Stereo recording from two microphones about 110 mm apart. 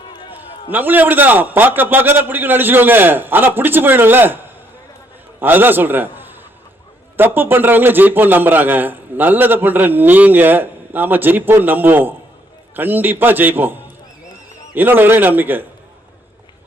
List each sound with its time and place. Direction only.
0.1 s a sound: 45° left (ahead or behind)
0.7 s a man's voice: 15° right (ahead or behind)
5.4 s a man's voice: 20° right (ahead or behind)